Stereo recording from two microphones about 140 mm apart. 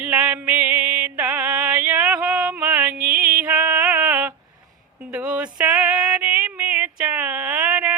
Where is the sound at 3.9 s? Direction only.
20° right (ahead or behind).